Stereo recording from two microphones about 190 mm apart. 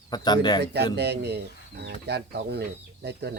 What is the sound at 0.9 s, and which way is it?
Speech, 60° right (ahead or behind).